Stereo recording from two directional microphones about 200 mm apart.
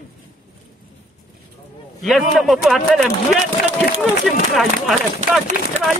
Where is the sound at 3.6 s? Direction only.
50° left (ahead or behind).